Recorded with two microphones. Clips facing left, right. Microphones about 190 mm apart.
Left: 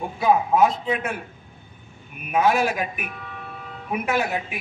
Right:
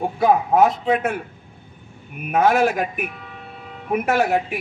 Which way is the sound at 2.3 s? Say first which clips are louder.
Right 3 dB; 55° right (ahead or behind).